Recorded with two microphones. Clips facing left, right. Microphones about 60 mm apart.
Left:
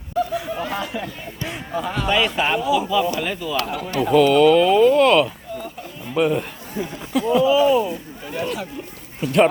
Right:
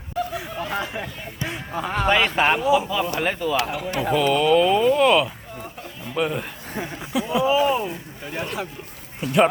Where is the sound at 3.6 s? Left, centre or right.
Centre.